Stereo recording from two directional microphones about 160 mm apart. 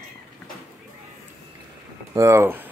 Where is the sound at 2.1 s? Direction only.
20° right (ahead or behind).